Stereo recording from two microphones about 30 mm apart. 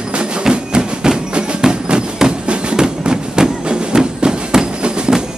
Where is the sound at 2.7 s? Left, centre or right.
Right.